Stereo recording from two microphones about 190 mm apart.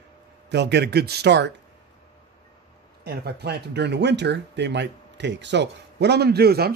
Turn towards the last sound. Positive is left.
turn(degrees=-55)  # may be behind; listen again after turning